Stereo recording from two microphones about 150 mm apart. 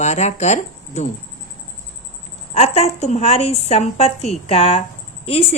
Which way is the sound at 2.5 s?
45° left (ahead or behind).